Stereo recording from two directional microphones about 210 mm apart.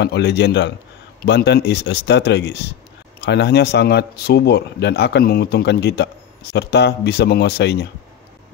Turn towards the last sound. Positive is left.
turn(degrees=50)  # may be behind; listen again after turning